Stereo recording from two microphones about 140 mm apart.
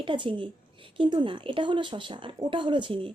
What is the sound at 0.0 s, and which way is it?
A woman's voice, 35° right (ahead or behind).